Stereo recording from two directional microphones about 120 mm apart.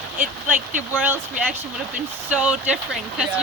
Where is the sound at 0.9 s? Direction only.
15° right (ahead or behind).